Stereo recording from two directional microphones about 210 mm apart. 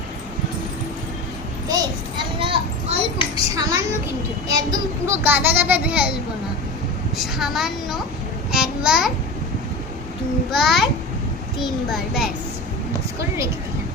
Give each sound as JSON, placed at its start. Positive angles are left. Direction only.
{"t": 1.6, "sound": "children playing", "side_deg": -20}
{"t": 3.3, "sound": "a sound", "side_deg": -15}
{"t": 4.4, "sound": "a child's voice", "side_deg": -15}
{"t": 7.2, "sound": "a woman's voice", "side_deg": 0}
{"t": 10.5, "sound": "a woman's voice", "side_deg": 0}
{"t": 11.9, "sound": "a woman's voice", "side_deg": 0}
{"t": 13.1, "sound": "a child's voice", "side_deg": -15}